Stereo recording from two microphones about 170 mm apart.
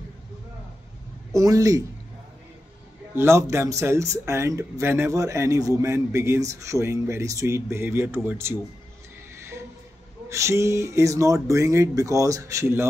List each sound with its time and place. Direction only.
1.3 s a man's voice: 20° right (ahead or behind)
3.2 s speech: 15° right (ahead or behind)
10.3 s speech: 15° right (ahead or behind)